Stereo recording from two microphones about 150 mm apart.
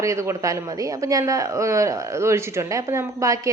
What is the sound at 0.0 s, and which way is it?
A man's voice, 20° right (ahead or behind).